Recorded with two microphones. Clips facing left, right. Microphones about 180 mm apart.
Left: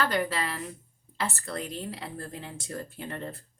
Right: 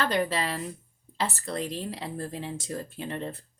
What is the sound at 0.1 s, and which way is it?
A woman's voice, 25° right (ahead or behind).